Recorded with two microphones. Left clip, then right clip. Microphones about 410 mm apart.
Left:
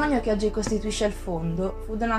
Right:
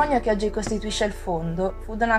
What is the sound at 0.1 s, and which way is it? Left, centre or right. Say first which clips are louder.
A woman's voice: right 2 dB; right.